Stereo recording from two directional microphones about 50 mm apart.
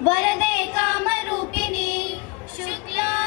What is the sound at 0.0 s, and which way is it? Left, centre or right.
Child singing, left.